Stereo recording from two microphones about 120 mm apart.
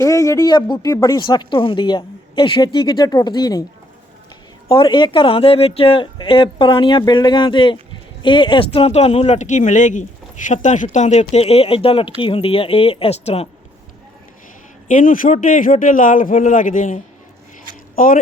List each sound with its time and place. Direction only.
0.0 s speech: 25° left (ahead or behind)
4.7 s speech: 40° left (ahead or behind); by 13.5 s 55° left (ahead or behind)
14.8 s a man's voice: 90° left